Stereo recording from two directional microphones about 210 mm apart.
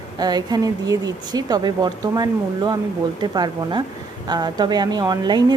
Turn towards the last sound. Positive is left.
turn(degrees=-20)  # may be behind; listen again after turning